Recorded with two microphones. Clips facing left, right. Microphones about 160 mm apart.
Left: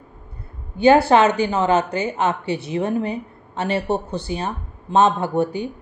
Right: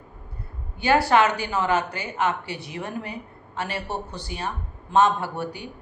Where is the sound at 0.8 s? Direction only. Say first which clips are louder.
Left 6 dB; 25° left (ahead or behind).